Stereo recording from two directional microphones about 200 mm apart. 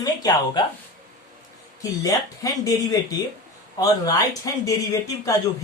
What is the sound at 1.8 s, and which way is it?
Speech, 15° left (ahead or behind).